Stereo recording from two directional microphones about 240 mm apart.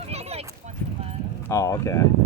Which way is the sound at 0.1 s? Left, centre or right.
Right.